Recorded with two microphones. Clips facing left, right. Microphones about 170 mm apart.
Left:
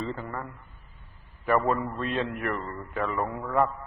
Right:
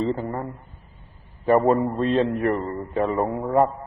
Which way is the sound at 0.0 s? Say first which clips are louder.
Right 8 dB; 30° right (ahead or behind).